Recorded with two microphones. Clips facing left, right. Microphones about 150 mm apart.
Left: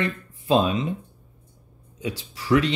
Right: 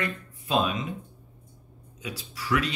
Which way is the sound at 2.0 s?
30° left (ahead or behind).